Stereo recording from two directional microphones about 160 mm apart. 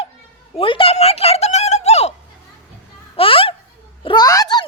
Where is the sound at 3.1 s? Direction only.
35° left (ahead or behind).